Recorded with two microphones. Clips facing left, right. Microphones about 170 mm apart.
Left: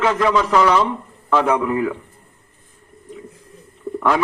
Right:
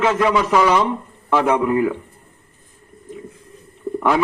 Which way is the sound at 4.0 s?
10° right (ahead or behind).